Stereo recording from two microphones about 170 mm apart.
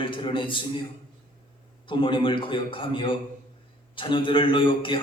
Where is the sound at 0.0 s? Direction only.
30° left (ahead or behind).